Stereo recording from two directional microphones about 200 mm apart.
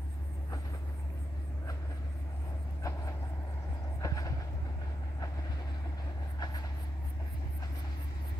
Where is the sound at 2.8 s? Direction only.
15° left (ahead or behind).